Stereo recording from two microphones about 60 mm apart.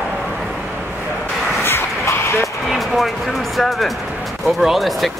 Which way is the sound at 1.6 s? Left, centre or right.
Left.